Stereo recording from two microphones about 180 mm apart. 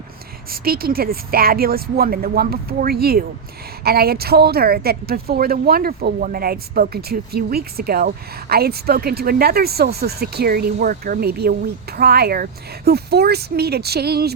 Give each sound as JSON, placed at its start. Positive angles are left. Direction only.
{"t": 0.5, "sound": "speech", "side_deg": -55}